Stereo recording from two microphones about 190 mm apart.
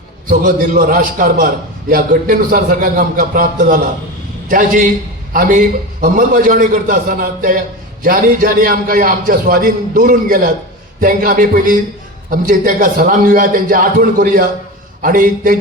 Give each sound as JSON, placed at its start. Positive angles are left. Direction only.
{"t": 0.3, "sound": "a man's voice", "side_deg": -45}